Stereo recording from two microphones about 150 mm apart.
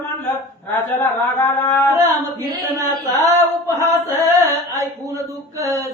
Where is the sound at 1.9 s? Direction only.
25° right (ahead or behind).